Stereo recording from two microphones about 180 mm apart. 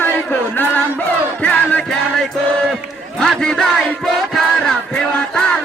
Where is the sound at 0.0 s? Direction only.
10° left (ahead or behind).